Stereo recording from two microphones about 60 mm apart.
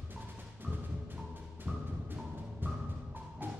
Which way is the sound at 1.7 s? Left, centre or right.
Right.